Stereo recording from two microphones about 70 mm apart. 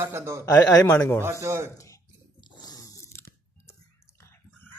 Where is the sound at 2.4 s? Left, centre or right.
Left.